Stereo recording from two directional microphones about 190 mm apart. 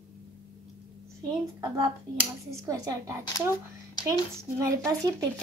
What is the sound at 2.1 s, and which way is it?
Speech, 15° right (ahead or behind).